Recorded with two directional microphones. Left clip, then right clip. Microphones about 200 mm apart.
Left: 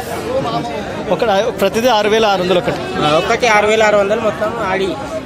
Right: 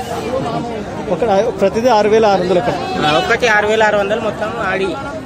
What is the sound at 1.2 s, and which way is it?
Speech, 5° right (ahead or behind).